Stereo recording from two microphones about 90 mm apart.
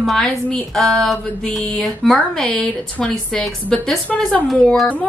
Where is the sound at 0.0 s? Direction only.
5° left (ahead or behind).